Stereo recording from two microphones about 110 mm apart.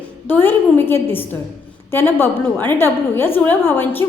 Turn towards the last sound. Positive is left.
turn(degrees=20)  # may be behind; listen again after turning